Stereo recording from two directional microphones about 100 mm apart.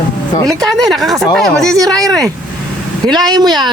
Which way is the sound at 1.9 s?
35° right (ahead or behind).